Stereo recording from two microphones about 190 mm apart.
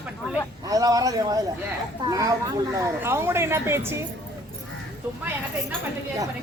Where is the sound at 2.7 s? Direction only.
15° right (ahead or behind).